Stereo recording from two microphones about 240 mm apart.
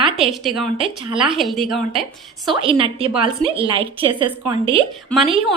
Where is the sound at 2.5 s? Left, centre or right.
Right.